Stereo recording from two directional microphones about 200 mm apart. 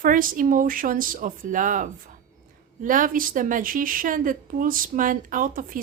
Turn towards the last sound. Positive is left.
turn(degrees=-45)  # may be behind; listen again after turning